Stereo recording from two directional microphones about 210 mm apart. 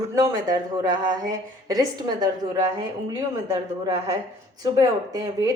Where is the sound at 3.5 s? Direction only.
20° right (ahead or behind).